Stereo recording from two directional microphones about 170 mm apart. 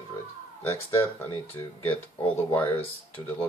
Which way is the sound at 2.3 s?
10° left (ahead or behind).